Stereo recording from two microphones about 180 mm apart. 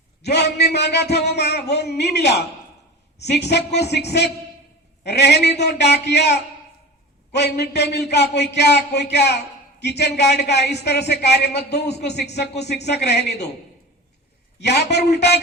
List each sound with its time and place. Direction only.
0.2 s speech: 70° left (ahead or behind)
14.6 s speech: 70° left (ahead or behind)